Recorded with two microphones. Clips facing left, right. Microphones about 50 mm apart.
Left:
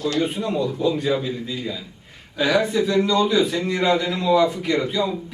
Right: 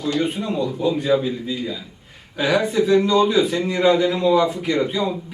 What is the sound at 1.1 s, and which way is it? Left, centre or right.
A man's voice, centre.